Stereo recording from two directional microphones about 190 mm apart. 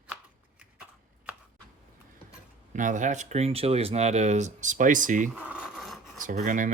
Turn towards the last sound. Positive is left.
turn(degrees=-40)  # may be behind; listen again after turning